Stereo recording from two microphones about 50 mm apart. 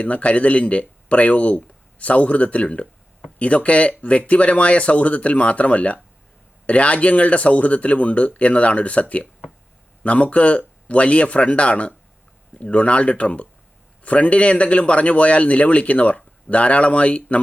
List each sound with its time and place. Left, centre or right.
0.0 s a man's voice: left